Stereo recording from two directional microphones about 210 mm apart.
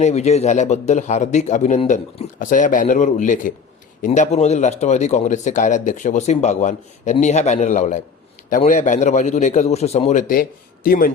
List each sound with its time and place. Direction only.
0.0 s speech: 30° left (ahead or behind)